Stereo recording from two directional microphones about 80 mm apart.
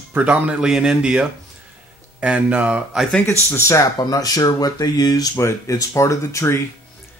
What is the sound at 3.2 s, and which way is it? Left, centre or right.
Speech, left.